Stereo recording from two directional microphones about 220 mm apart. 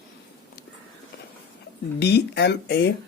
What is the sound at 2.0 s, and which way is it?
Speech, 50° left (ahead or behind).